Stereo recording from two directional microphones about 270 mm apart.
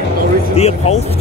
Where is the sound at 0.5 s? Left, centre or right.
Left.